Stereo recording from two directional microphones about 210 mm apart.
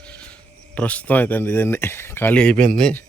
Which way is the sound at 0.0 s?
5° left (ahead or behind).